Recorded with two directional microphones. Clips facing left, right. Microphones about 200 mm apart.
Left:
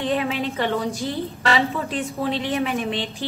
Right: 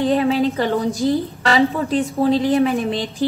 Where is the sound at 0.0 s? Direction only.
35° right (ahead or behind).